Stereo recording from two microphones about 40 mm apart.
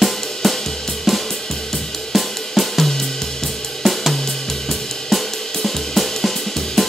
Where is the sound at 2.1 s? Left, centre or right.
Centre.